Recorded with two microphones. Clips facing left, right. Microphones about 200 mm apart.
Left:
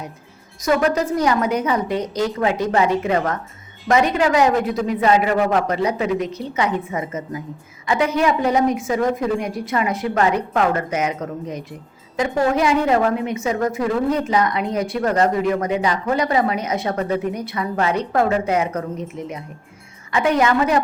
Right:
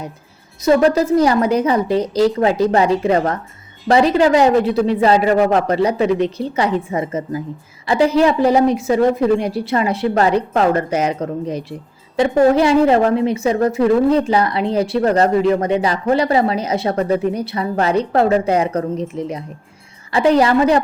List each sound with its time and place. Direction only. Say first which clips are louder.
0.6 s a woman's voice: right 5 dB; 30° right (ahead or behind)